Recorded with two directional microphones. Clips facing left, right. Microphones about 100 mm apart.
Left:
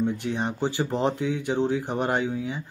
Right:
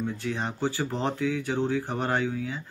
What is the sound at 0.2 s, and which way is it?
Speech, 20° left (ahead or behind).